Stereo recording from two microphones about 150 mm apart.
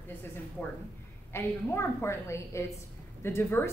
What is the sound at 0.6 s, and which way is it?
A woman's voice, 15° left (ahead or behind).